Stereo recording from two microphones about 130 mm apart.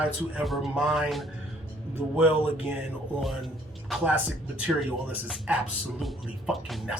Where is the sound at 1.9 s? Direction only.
15° right (ahead or behind).